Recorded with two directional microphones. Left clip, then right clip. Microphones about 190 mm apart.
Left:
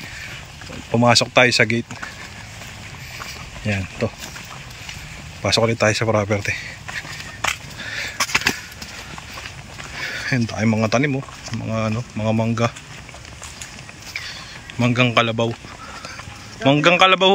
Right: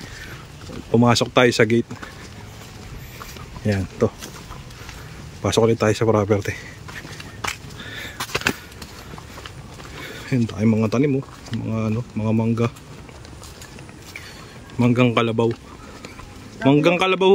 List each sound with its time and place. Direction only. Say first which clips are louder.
0.9 s speech: left 2 dB; 15° right (ahead or behind)
3.6 s speech: right 3 dB; 15° right (ahead or behind)
5.4 s speech: left 1 dB; 15° right (ahead or behind)
7.4 s skateboard: left 5 dB; 10° right (ahead or behind)
9.9 s speech: left 4 dB; 10° right (ahead or behind)
14.8 s speech: left 1 dB; 15° right (ahead or behind)
16.6 s speech: left 3 dB; 10° right (ahead or behind)